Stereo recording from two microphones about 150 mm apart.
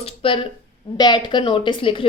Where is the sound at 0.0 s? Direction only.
35° left (ahead or behind).